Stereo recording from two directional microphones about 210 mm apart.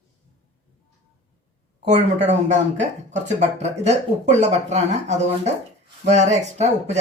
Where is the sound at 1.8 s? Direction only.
35° right (ahead or behind).